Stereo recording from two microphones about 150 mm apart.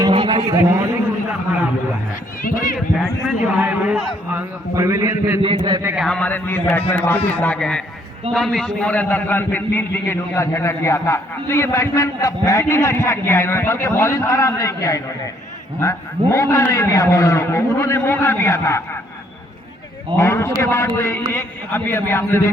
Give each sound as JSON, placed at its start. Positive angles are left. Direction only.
{"t": 0.1, "sound": "a sound", "side_deg": -30}
{"t": 2.4, "sound": "speech", "side_deg": 65}
{"t": 3.2, "sound": "a man's voice", "side_deg": -5}
{"t": 4.7, "sound": "a man's voice", "side_deg": -20}
{"t": 6.0, "sound": "a man's voice", "side_deg": 5}
{"t": 20.1, "sound": "a man's voice", "side_deg": 20}